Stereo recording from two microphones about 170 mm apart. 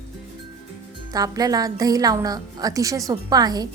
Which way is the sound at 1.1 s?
20° right (ahead or behind).